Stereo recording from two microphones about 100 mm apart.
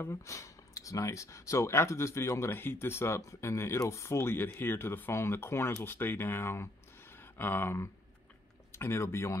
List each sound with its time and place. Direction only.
0.0 s speech: 30° left (ahead or behind)